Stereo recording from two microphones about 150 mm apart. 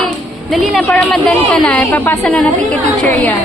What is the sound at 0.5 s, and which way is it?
A woman's voice, centre (ahead or behind).